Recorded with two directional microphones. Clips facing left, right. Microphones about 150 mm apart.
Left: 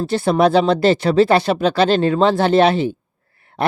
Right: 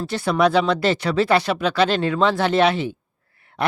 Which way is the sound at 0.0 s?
30° left (ahead or behind).